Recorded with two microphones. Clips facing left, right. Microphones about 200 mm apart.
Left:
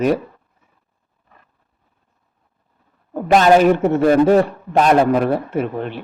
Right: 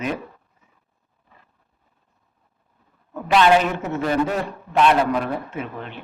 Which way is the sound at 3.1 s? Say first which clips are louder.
Left 5 dB; 50° left (ahead or behind).